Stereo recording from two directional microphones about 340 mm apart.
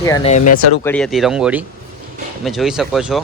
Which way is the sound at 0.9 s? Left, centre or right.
Centre.